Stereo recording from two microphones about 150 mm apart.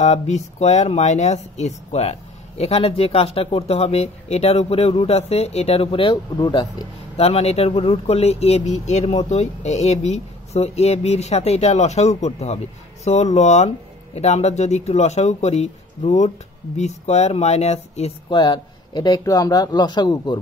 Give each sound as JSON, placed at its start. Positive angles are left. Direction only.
{"t": 0.0, "sound": "speech", "side_deg": 50}
{"t": 7.2, "sound": "speech", "side_deg": 45}
{"t": 18.3, "sound": "a man's voice", "side_deg": 30}